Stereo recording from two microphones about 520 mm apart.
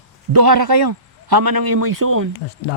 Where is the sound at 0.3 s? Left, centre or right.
Right.